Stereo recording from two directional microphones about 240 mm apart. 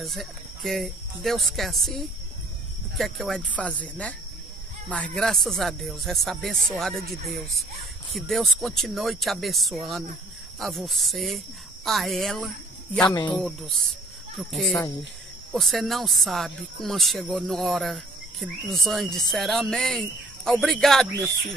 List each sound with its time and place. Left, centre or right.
0.0 s speech: centre
8.1 s speech: centre
13.1 s speech: centre
14.3 s speech: centre